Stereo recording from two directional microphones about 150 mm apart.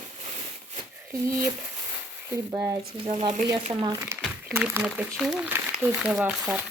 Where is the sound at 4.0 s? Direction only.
10° right (ahead or behind).